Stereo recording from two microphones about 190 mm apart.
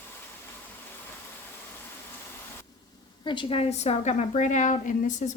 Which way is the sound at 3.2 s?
25° left (ahead or behind).